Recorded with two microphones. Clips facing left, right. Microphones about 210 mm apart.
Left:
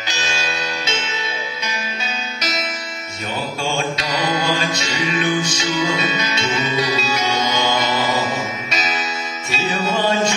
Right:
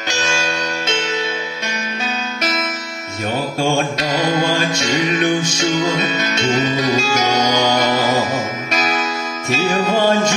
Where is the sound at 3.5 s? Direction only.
50° right (ahead or behind).